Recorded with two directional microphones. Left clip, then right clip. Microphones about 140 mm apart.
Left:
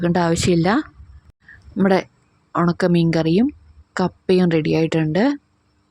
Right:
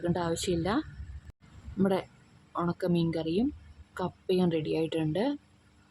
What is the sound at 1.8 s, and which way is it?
Speech, 50° left (ahead or behind).